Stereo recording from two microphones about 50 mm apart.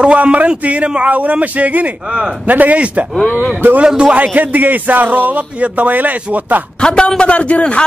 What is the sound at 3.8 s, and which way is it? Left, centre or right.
Speech, centre.